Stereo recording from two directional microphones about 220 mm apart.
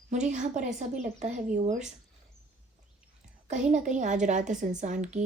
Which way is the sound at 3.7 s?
35° right (ahead or behind).